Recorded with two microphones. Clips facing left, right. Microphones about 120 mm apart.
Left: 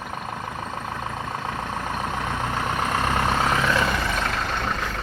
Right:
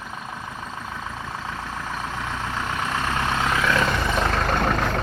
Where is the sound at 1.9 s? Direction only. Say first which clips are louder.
Left 2 dB; 50° left (ahead or behind).